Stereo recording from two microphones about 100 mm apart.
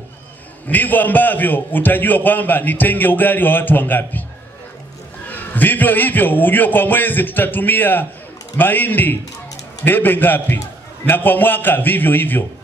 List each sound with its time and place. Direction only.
0.7 s a man's voice: 15° left (ahead or behind)
5.3 s a man's voice: 20° left (ahead or behind)